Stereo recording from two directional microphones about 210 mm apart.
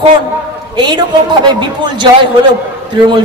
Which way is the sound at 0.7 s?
20° right (ahead or behind).